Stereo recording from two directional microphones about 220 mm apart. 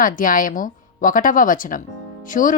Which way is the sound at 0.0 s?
40° left (ahead or behind).